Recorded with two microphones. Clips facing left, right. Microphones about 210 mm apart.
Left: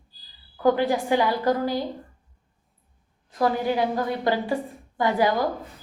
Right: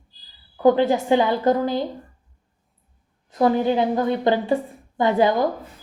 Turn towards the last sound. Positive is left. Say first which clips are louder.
# right 4 dB
turn(degrees=-25)  # may be behind; listen again after turning